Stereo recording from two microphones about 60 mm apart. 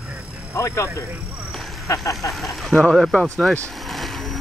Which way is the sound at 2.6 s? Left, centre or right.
Centre.